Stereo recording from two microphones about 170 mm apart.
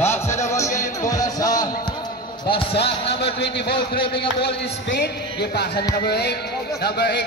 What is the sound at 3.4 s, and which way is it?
Speech, 85° left.